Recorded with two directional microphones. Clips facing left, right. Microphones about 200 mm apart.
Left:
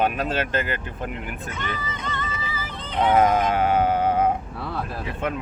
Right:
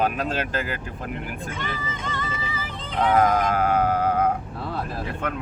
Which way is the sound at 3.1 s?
5° left (ahead or behind).